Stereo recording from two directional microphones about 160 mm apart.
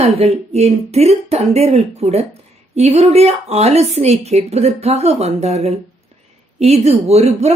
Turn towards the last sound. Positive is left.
turn(degrees=-40)  # may be behind; listen again after turning